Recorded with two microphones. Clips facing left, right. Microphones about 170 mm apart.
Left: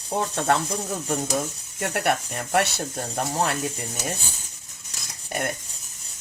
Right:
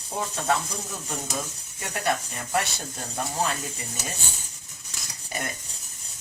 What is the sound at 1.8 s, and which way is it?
Speech, 65° left (ahead or behind).